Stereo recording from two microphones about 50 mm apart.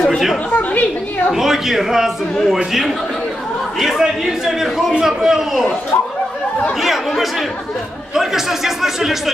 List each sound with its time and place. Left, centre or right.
0.5 s chatter: left
1.3 s a man's voice: centre
6.8 s a man's voice: centre